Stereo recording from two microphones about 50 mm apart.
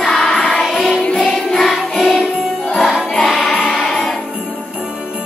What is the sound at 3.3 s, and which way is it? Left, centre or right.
Music, centre.